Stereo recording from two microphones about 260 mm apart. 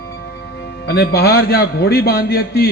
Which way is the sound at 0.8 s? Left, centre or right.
Left.